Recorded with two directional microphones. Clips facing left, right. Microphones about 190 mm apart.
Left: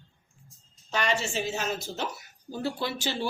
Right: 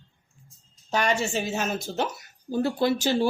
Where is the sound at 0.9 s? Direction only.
45° right (ahead or behind).